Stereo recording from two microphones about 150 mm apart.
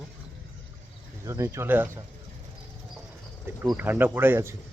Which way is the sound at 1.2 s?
20° right (ahead or behind).